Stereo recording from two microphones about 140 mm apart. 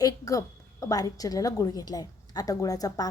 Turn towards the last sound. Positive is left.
turn(degrees=25)  # may be behind; listen again after turning